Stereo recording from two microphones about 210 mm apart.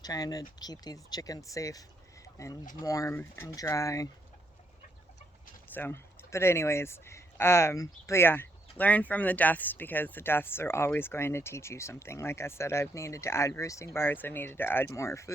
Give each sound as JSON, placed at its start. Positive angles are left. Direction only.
{"t": 0.0, "sound": "speech", "side_deg": 20}
{"t": 5.6, "sound": "speech", "side_deg": 10}